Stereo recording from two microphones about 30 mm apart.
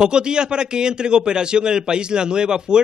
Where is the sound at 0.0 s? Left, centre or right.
Right.